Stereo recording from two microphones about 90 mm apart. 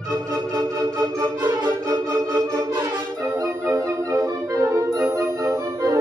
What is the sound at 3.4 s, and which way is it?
Music, 35° right (ahead or behind).